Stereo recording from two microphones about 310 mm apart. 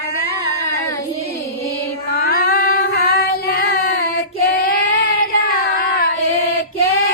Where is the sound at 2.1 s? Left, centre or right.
Left.